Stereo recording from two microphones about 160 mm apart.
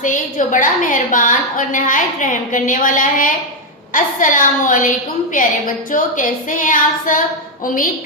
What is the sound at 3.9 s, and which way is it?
A woman's voice, 55° left (ahead or behind).